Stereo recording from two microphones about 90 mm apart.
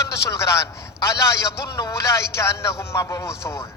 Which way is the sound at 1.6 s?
35° left (ahead or behind).